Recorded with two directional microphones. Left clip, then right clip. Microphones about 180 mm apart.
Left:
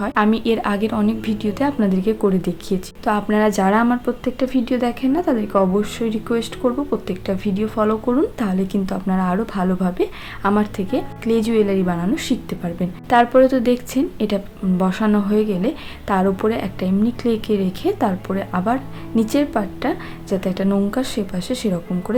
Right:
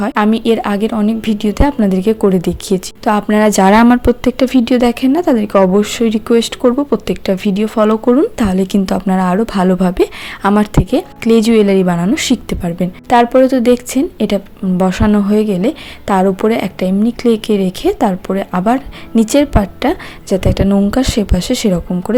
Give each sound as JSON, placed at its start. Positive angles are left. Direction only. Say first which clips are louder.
{"t": 0.0, "sound": "a woman's voice", "louder": "right 5 dB", "side_deg": -35}